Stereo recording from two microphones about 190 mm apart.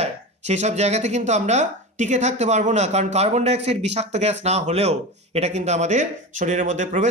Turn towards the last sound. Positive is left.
turn(degrees=-40)  # may be behind; listen again after turning